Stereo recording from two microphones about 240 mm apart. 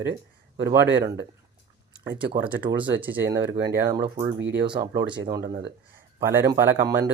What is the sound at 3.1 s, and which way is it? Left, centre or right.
Speech, right.